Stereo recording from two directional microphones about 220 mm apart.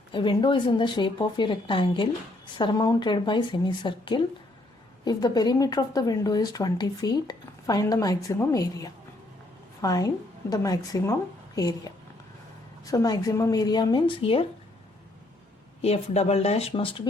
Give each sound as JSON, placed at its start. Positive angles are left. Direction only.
{"t": 0.1, "sound": "a woman's voice", "side_deg": 20}
{"t": 15.8, "sound": "a woman's voice", "side_deg": 30}